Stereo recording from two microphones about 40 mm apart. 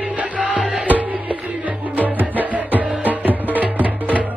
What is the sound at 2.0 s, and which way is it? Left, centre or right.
Music, right.